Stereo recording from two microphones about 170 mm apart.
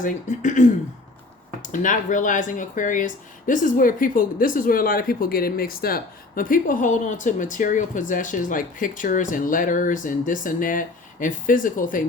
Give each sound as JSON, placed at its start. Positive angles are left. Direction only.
{"t": 0.0, "sound": "speech", "side_deg": 45}